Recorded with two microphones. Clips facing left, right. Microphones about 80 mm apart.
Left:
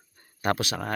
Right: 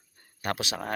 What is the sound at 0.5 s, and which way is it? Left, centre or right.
Speech, centre.